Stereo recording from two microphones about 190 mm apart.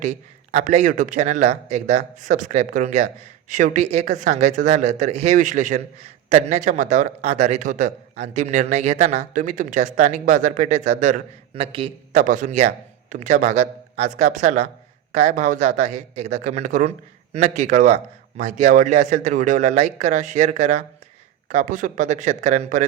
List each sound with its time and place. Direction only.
0.5 s a man's voice: 40° right (ahead or behind)
12.2 s a man's voice: 40° right (ahead or behind)